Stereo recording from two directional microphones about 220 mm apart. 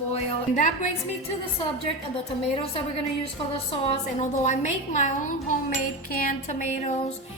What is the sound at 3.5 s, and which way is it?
A woman's voice, 25° left (ahead or behind).